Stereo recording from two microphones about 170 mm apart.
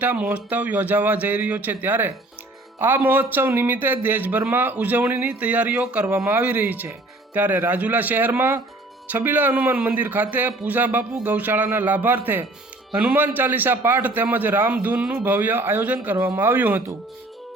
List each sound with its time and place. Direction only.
0.0 s speech: 10° right (ahead or behind)